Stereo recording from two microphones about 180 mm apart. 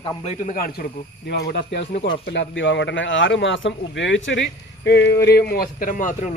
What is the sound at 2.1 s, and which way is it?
Speech, 80° left.